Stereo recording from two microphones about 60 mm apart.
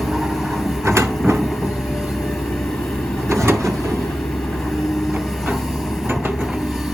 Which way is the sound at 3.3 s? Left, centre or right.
Right.